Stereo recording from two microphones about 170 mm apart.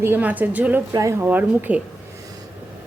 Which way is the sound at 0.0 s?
10° right (ahead or behind).